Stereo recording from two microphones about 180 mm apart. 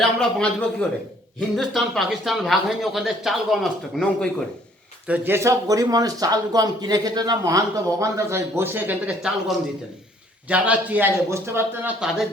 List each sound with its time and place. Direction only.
0.2 s speech: 5° left (ahead or behind)
5.0 s speech: 10° right (ahead or behind)